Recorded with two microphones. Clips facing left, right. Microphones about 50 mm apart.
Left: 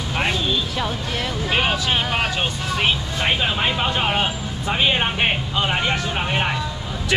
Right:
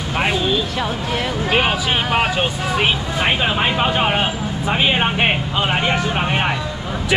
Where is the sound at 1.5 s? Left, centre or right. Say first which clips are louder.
Right 2 dB; centre.